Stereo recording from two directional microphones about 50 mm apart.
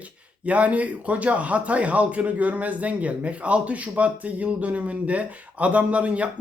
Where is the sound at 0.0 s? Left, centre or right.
Right.